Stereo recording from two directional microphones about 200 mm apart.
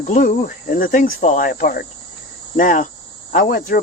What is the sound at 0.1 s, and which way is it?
Speech, 40° left (ahead or behind).